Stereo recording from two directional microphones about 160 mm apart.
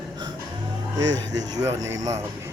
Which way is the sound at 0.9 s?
25° right (ahead or behind).